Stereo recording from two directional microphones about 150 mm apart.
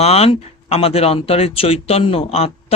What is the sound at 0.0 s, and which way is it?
Speech, 45° left (ahead or behind).